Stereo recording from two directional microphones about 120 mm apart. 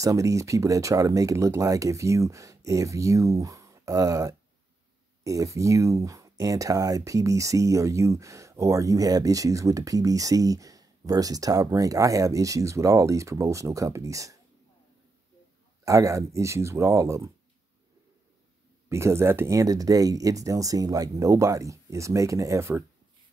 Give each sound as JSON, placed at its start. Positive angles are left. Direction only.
{"t": 0.0, "sound": "speech", "side_deg": -25}
{"t": 15.8, "sound": "speech", "side_deg": -25}
{"t": 18.9, "sound": "speech", "side_deg": -25}